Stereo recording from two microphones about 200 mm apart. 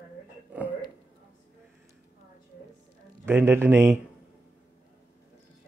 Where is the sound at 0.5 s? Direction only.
10° right (ahead or behind).